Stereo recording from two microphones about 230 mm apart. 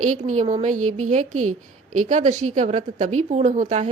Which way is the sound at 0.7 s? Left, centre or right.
Right.